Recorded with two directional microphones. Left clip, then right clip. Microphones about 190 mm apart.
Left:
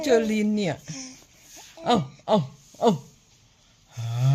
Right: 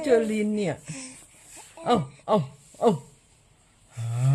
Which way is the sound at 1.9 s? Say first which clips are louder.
Left 1 dB; 5° left (ahead or behind).